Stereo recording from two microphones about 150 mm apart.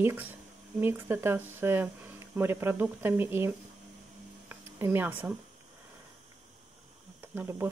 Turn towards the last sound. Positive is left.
turn(degrees=-15)  # may be behind; listen again after turning